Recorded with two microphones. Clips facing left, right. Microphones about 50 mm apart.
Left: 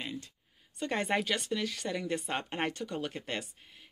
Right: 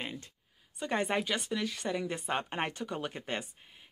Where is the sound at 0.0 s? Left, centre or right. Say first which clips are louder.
Even; right.